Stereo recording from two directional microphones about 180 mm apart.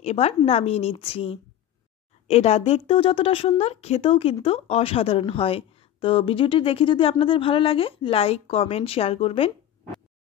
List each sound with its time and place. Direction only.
0.0 s speech: 35° left (ahead or behind)